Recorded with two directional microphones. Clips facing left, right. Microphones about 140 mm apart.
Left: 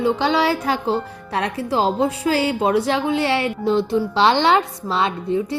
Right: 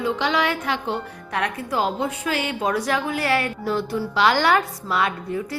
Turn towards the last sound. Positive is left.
turn(degrees=25)  # may be behind; listen again after turning